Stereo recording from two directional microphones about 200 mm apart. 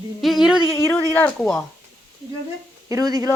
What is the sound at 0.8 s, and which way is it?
Speech, 15° left (ahead or behind).